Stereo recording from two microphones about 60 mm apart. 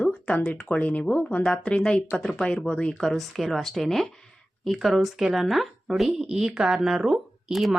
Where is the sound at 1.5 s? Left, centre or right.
Centre.